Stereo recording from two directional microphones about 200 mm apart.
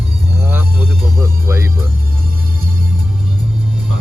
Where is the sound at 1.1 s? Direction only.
15° right (ahead or behind).